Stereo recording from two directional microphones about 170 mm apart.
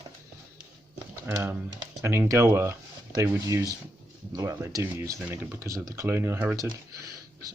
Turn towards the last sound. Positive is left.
turn(degrees=-20)  # may be behind; listen again after turning